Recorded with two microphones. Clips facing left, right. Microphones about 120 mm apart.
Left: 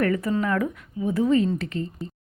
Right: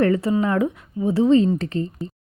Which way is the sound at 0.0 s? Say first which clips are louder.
Right 4 dB; 30° right (ahead or behind).